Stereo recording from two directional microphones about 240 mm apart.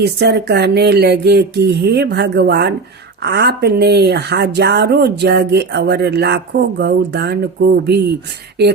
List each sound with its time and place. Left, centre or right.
0.0 s speech: right